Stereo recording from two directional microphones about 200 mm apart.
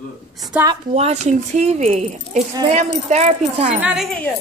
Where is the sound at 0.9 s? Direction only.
35° right (ahead or behind).